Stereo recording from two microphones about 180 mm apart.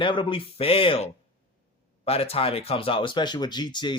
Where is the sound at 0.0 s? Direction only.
25° left (ahead or behind).